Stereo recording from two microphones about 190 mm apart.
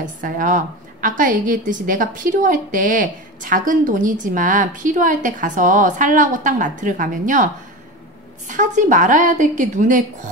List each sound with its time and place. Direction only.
0.0 s a woman's voice: 45° right (ahead or behind)
8.5 s a woman's voice: 40° right (ahead or behind)